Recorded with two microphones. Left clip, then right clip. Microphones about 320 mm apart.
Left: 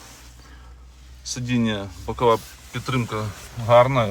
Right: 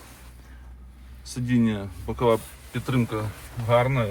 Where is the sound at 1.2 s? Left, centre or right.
Centre.